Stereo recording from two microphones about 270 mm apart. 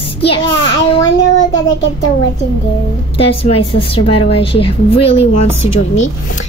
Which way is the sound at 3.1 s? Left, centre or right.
Left.